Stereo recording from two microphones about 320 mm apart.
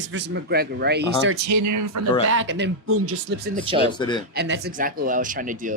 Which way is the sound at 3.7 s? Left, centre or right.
Centre.